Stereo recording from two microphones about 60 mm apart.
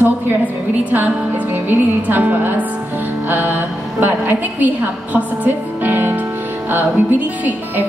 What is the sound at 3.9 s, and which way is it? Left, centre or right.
A woman's voice, right.